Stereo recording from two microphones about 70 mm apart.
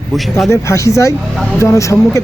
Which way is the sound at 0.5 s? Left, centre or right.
Left.